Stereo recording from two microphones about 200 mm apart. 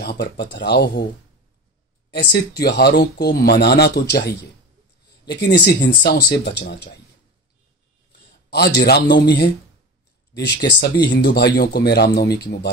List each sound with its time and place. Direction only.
0.0 s speech: 55° left (ahead or behind)
2.0 s speech: 60° left (ahead or behind)
5.3 s speech: 55° left (ahead or behind)
8.5 s speech: 55° left (ahead or behind)